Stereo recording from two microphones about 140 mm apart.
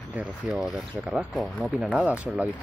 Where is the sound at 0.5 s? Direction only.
Centre (ahead or behind).